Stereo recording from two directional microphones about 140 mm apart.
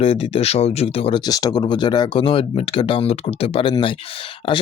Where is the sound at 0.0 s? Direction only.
45° left (ahead or behind).